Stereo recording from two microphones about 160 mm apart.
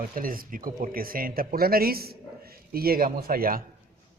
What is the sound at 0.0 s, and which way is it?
Speech, 60° right (ahead or behind).